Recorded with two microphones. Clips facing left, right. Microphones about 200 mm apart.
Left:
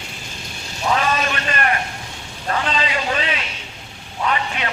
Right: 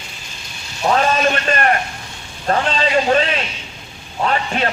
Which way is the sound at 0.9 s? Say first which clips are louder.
Right 6 dB; 45° right (ahead or behind).